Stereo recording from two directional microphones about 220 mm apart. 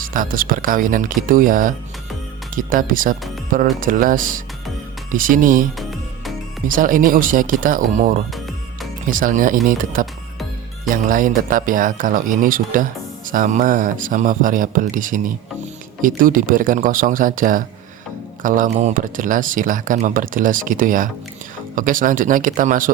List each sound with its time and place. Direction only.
0.0 s speech: 40° right (ahead or behind)
6.7 s speech: 40° right (ahead or behind)